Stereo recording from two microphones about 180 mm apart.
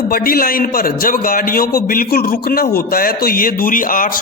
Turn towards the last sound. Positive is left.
turn(degrees=50)  # may be behind; listen again after turning